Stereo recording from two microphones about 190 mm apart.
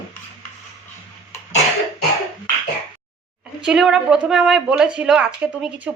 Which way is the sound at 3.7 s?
Centre (ahead or behind).